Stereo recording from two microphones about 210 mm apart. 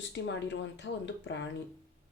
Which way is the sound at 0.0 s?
60° left (ahead or behind).